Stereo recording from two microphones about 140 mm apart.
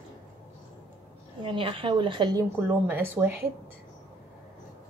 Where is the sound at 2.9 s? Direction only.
15° right (ahead or behind).